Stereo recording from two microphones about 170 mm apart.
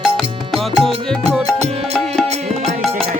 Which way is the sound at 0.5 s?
Centre (ahead or behind).